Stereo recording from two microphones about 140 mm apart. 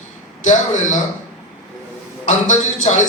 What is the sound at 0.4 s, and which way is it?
Speech, 60° left (ahead or behind).